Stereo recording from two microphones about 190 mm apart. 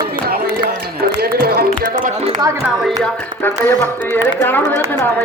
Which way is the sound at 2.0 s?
40° right (ahead or behind).